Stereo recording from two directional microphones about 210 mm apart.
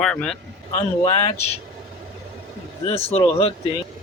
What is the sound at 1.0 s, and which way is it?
Speech, 25° left (ahead or behind).